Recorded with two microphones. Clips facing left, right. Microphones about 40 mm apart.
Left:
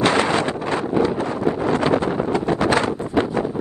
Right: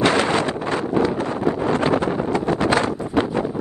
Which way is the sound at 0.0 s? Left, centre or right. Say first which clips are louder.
Even; left.